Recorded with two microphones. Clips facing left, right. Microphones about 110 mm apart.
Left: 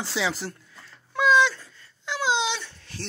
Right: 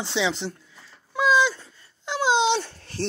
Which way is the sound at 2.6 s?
45° right (ahead or behind).